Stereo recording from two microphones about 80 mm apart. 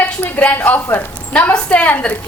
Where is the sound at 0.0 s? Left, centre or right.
Centre.